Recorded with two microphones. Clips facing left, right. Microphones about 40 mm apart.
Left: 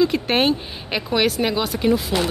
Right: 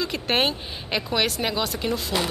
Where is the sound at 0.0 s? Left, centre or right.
Centre.